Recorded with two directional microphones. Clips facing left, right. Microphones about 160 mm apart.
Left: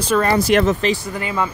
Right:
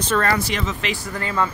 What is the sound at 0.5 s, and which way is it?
Speech, 55° left (ahead or behind).